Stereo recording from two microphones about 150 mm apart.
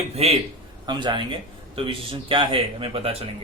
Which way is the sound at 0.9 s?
30° right (ahead or behind).